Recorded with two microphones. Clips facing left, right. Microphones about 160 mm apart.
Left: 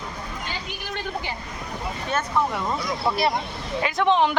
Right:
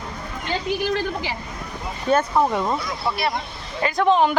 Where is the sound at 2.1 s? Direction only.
40° right (ahead or behind).